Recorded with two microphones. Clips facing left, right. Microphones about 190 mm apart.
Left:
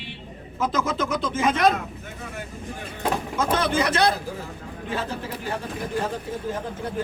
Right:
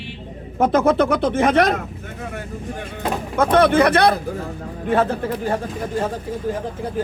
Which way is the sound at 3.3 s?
60° right (ahead or behind).